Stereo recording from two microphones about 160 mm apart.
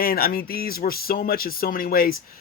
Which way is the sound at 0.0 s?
70° left (ahead or behind).